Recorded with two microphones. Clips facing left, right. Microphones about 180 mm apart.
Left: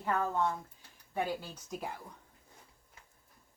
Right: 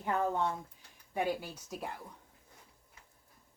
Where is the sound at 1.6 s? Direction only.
Centre (ahead or behind).